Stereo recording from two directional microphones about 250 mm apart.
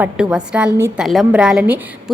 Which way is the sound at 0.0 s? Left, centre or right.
Centre.